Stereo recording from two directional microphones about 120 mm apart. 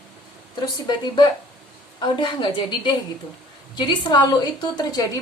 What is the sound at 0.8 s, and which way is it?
A woman's voice, 40° left (ahead or behind).